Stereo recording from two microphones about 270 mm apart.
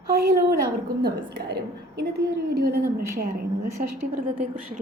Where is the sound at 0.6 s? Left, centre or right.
Right.